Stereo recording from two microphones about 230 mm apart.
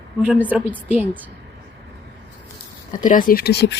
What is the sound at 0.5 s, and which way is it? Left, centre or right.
Speech, centre.